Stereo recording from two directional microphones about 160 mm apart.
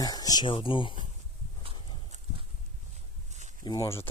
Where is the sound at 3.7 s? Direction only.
20° left (ahead or behind).